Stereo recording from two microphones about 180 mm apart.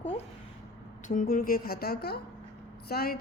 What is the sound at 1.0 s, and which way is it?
A woman's voice, 50° left (ahead or behind).